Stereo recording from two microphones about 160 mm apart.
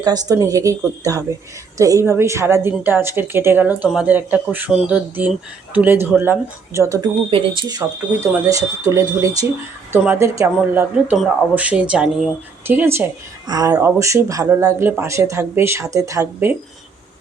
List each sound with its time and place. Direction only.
0.0 s a woman's voice: 25° right (ahead or behind)
7.3 s a woman's voice: 30° right (ahead or behind); by 16.6 s 15° right (ahead or behind)